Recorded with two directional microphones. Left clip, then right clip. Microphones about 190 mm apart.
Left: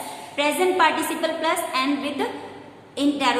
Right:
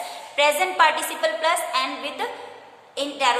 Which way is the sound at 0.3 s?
25° right (ahead or behind).